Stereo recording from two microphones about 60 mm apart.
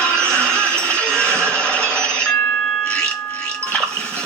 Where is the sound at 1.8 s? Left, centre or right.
Right.